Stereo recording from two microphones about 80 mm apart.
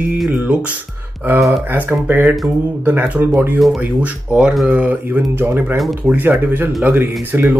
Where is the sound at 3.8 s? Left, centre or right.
Centre.